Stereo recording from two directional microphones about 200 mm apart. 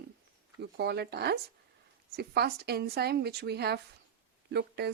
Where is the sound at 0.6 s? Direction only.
55° right (ahead or behind).